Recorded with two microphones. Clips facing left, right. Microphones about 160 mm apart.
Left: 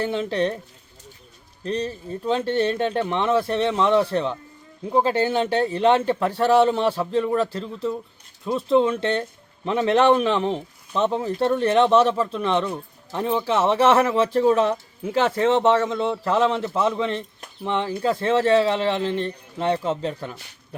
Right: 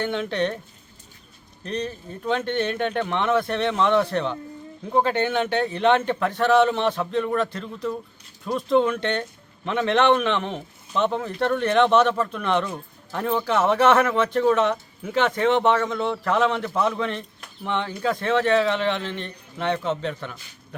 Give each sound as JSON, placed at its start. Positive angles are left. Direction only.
{"t": 0.0, "sound": "a man's voice", "side_deg": 30}
{"t": 1.6, "sound": "a man's voice", "side_deg": 30}